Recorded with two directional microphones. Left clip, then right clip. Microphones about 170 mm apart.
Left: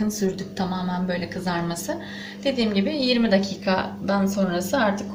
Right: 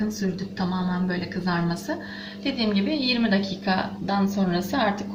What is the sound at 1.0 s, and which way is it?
A woman's voice, 50° left (ahead or behind).